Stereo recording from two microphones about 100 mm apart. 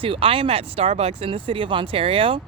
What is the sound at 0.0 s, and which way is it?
Speech, 65° right (ahead or behind).